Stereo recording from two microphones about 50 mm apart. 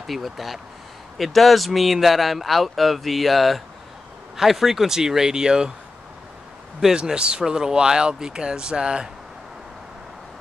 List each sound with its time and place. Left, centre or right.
0.0 s speech: centre
6.8 s speech: centre